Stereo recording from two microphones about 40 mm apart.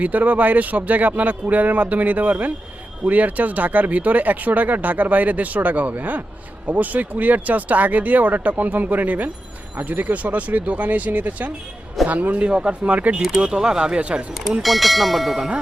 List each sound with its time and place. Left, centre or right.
0.0 s speech: right
12.5 s speech: right
13.4 s speech: centre
14.0 s speech: right
14.6 s speech: centre
15.4 s speech: right